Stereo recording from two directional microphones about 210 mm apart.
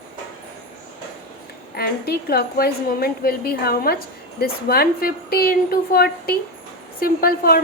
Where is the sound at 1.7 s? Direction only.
45° left (ahead or behind).